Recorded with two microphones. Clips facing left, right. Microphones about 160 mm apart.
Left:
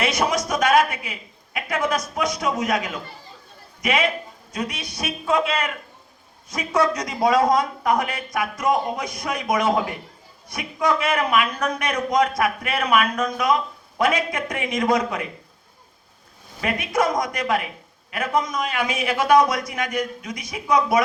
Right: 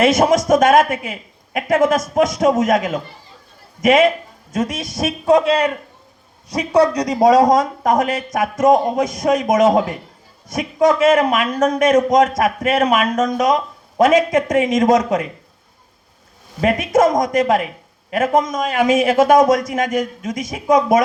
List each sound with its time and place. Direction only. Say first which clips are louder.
0.0 s a man's voice: right 9 dB; 45° right (ahead or behind)
16.6 s a man's voice: right 8 dB; 45° right (ahead or behind)